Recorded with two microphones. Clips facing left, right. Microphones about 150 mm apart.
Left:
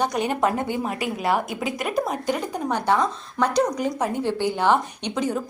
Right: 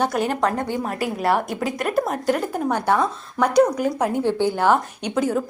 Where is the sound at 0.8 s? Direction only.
Centre (ahead or behind).